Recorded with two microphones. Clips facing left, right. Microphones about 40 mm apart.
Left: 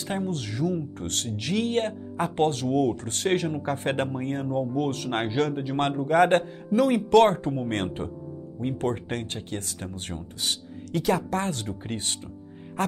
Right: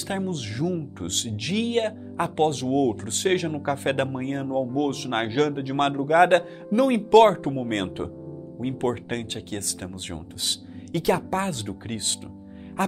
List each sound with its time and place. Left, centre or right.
0.2 s speech: right
11.1 s speech: right